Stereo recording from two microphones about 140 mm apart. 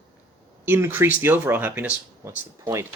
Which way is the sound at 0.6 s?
15° right (ahead or behind).